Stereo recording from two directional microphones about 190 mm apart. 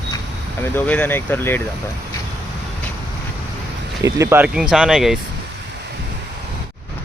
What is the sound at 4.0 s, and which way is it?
Speech, 15° right (ahead or behind).